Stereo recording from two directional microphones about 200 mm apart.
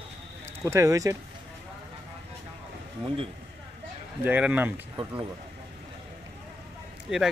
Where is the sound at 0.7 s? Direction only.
15° right (ahead or behind).